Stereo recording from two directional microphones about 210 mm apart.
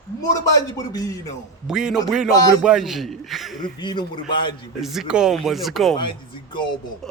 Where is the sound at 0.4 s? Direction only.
15° left (ahead or behind).